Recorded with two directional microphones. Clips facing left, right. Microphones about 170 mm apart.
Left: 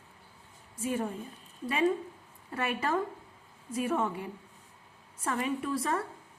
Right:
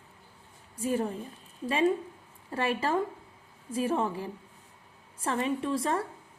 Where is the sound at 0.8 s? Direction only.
35° right (ahead or behind).